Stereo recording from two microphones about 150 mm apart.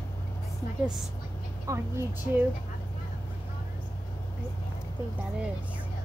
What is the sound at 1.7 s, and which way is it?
Speech, 20° right (ahead or behind).